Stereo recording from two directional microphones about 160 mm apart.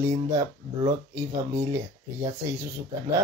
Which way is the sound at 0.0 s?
25° right (ahead or behind).